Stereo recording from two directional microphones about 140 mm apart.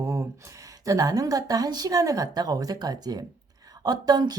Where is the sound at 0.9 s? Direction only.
25° right (ahead or behind).